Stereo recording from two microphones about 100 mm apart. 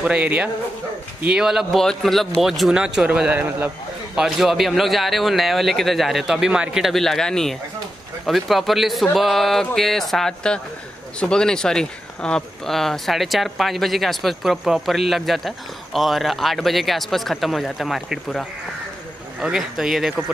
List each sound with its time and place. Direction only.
0.0 s a man's voice: 15° right (ahead or behind)
4.1 s speech: 5° right (ahead or behind)